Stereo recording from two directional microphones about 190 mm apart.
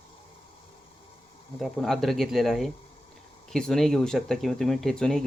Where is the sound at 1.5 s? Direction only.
Centre (ahead or behind).